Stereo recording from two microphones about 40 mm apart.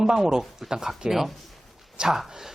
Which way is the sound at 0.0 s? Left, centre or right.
Centre.